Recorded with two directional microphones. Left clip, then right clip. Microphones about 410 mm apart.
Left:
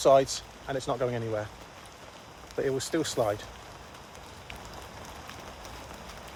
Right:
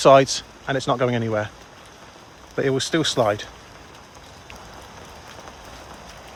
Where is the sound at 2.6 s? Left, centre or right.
Right.